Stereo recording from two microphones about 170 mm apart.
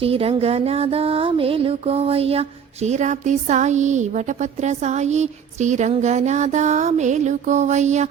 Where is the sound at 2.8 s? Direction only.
45° right (ahead or behind).